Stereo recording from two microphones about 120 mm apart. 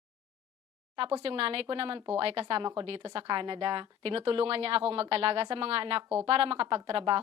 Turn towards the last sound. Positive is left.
turn(degrees=-50)  # may be behind; listen again after turning